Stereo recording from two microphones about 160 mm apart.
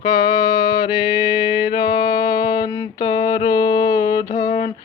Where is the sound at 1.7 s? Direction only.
30° left (ahead or behind).